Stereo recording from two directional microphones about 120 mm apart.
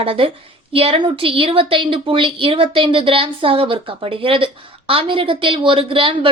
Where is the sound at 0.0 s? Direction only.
50° right (ahead or behind).